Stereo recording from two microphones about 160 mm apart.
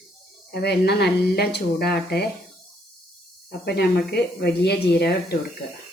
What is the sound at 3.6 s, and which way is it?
Speech, 90° left.